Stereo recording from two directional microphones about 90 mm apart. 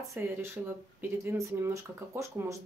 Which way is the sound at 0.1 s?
25° right (ahead or behind).